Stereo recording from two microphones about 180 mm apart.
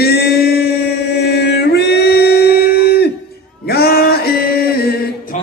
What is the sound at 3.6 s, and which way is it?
Male singing, 60° left (ahead or behind).